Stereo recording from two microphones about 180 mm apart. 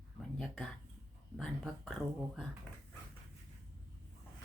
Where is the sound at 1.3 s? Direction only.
Centre (ahead or behind).